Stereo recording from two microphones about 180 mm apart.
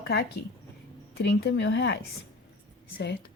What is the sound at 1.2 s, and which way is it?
Speech, 70° left (ahead or behind).